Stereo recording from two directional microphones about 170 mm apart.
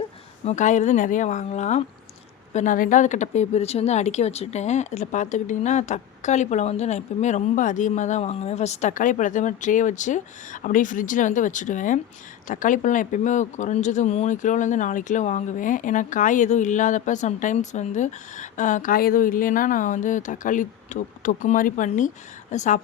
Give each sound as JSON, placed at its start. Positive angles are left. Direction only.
{"t": 0.4, "sound": "speech", "side_deg": 45}